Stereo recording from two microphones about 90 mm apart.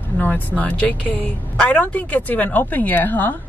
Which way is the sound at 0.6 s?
15° left (ahead or behind).